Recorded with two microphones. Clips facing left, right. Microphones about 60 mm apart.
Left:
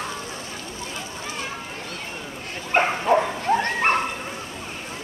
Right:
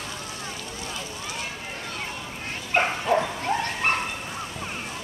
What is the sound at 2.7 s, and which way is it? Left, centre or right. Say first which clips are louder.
Bow-wow: left 3 dB; centre.